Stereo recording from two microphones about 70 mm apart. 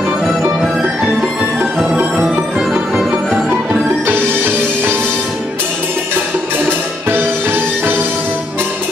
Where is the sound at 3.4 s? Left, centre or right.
Right.